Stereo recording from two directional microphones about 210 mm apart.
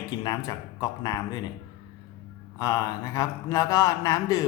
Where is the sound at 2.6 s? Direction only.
15° left (ahead or behind).